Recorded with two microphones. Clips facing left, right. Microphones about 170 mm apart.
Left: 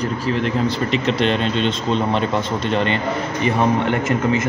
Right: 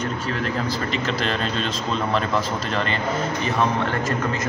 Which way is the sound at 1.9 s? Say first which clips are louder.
Left 2 dB; 30° left (ahead or behind).